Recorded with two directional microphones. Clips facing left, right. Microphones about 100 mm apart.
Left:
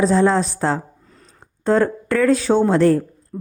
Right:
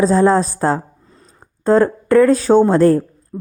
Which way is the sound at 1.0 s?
25° right (ahead or behind).